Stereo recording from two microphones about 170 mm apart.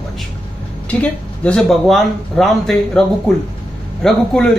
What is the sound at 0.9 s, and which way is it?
Speech, 5° left (ahead or behind).